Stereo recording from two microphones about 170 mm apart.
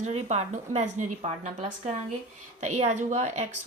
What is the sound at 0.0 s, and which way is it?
A woman's voice, 40° right (ahead or behind).